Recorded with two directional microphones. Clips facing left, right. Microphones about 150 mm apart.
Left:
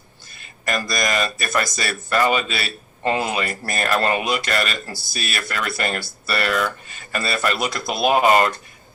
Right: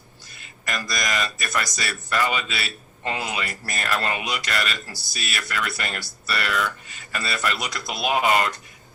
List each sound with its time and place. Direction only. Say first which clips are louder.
0.6 s speech: left 6 dB; 50° left (ahead or behind)